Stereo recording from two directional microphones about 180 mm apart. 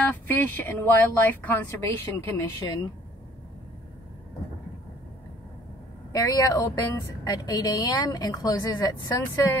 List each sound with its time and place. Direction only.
0.0 s speech: 10° left (ahead or behind)
6.1 s a woman's voice: 20° left (ahead or behind)